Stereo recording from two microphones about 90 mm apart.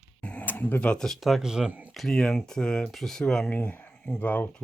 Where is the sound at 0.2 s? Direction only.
15° left (ahead or behind); by 1.9 s 10° right (ahead or behind).